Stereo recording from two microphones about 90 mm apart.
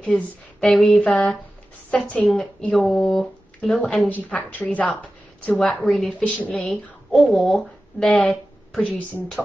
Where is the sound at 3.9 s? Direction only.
15° left (ahead or behind).